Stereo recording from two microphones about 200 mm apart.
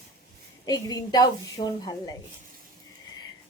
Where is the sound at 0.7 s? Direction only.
20° left (ahead or behind).